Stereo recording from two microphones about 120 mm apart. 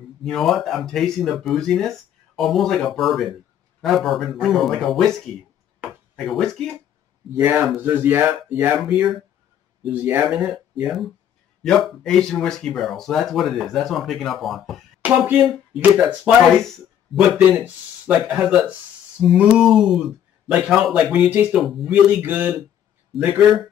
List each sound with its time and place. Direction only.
0.2 s speech: centre (ahead or behind)
7.3 s speech: 15° right (ahead or behind)
9.8 s speech: 15° right (ahead or behind)
10.2 s speech: centre (ahead or behind)
15.0 s speech: 15° right (ahead or behind)
15.4 s speech: 5° right (ahead or behind)
17.5 s speech: 10° right (ahead or behind)
21.5 s speech: centre (ahead or behind)
22.2 s speech: 15° right (ahead or behind)